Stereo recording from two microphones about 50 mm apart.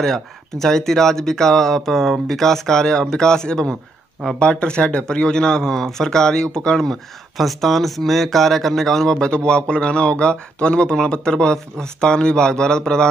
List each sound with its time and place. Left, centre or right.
0.0 s speech: centre
7.3 s speech: centre